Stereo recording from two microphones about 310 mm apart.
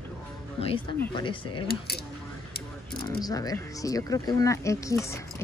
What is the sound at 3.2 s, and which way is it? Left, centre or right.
A woman's voice, centre.